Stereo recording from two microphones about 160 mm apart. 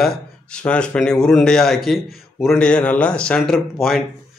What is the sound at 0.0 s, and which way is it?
A man's voice, 5° left (ahead or behind).